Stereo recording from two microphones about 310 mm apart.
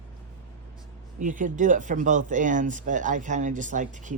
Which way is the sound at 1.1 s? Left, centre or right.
Right.